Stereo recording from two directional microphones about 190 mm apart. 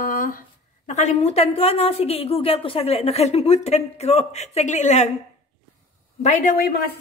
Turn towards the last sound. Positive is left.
turn(degrees=45)  # may be behind; listen again after turning